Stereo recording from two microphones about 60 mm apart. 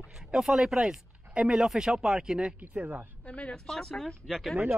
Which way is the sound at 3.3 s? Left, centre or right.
Centre.